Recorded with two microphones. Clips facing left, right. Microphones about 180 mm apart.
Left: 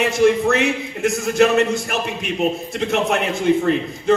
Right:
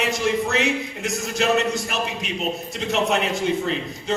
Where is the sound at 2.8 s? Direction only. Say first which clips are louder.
Left 2 dB; 55° left (ahead or behind).